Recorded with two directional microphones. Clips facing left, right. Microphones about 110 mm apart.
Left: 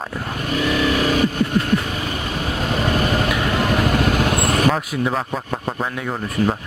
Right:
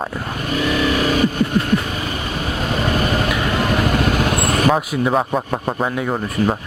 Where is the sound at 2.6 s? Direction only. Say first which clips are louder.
Even; 15° right (ahead or behind).